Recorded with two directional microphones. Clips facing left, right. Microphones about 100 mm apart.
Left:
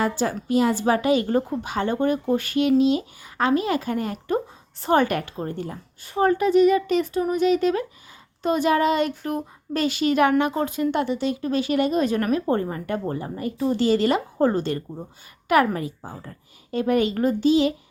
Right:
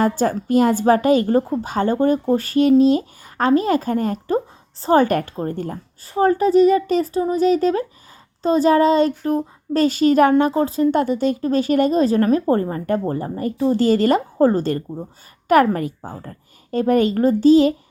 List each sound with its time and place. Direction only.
0.0 s a woman's voice: 45° right (ahead or behind)